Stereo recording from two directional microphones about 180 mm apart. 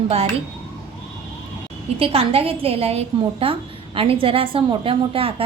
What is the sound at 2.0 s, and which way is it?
A woman's voice, 35° right (ahead or behind).